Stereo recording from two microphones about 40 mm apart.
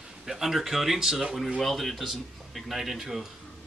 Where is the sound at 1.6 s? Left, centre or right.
Centre.